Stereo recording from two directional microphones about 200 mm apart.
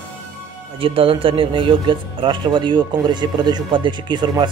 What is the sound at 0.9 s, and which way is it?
Speech, 25° right (ahead or behind).